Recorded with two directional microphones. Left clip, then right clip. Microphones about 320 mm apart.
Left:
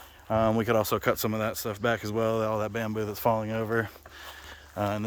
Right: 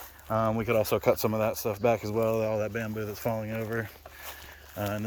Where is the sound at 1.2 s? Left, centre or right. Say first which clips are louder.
Right 2 dB; centre.